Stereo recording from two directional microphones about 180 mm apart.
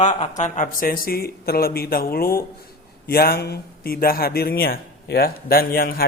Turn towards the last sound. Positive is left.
turn(degrees=55)  # may be behind; listen again after turning